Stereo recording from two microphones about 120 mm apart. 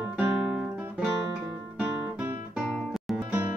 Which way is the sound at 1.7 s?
10° right (ahead or behind).